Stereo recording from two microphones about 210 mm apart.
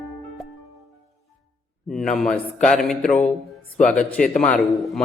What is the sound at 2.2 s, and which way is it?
A man's voice, 5° left (ahead or behind).